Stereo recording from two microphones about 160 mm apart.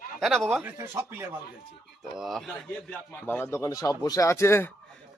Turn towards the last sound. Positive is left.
turn(degrees=15)  # may be behind; listen again after turning